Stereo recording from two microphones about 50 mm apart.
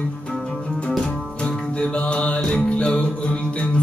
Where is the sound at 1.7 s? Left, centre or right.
Left.